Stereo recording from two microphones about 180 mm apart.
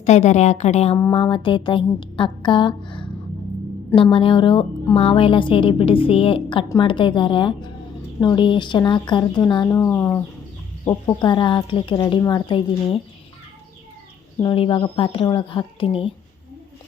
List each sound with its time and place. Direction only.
0.0 s a woman's voice: 40° left (ahead or behind)
14.5 s speech: 30° left (ahead or behind)